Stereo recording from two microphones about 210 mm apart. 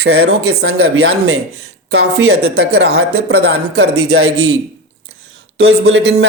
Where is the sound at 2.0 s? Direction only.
80° right.